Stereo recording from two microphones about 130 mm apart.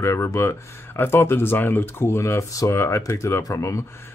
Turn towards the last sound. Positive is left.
turn(degrees=25)  # may be behind; listen again after turning